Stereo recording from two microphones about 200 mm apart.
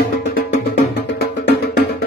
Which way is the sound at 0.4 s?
50° left (ahead or behind).